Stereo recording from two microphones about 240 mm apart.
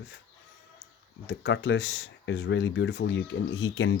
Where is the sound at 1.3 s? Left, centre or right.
Left.